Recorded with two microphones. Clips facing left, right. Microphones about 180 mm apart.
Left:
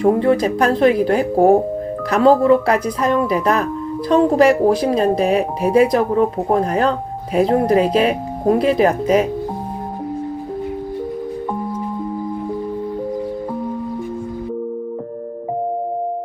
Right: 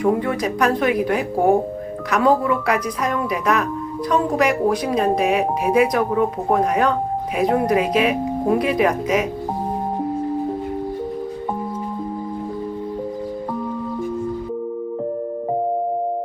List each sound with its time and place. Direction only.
0.0 s speech: 30° left (ahead or behind)